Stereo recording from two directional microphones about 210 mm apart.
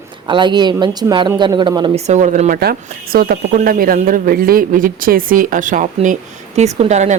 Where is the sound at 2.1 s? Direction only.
35° right (ahead or behind).